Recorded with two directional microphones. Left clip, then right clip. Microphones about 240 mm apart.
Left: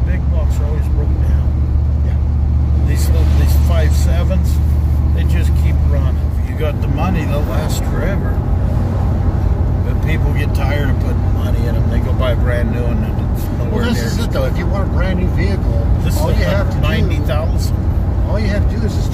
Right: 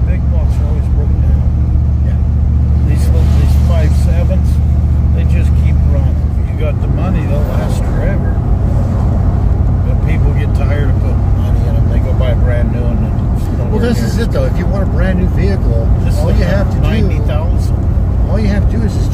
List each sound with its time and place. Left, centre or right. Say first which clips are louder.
13.8 s vehicle: right 3 dB; right